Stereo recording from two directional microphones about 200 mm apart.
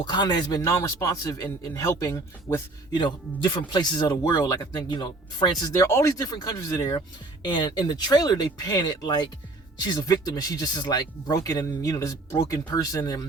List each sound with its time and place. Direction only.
0.0 s speech: 20° left (ahead or behind)